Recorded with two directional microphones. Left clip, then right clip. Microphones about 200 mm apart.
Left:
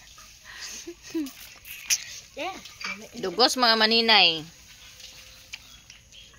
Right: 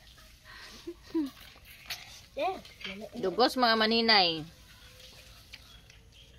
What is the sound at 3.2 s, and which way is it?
Speech, 5° left (ahead or behind).